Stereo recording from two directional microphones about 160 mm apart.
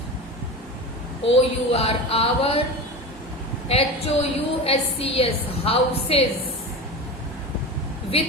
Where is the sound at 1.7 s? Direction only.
35° left (ahead or behind).